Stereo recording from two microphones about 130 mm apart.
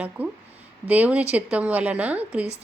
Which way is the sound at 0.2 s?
10° right (ahead or behind).